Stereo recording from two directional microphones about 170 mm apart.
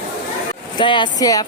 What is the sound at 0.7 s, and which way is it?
Speech, 30° left (ahead or behind).